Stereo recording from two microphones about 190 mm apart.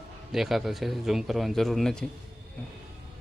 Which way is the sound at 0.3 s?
Centre (ahead or behind).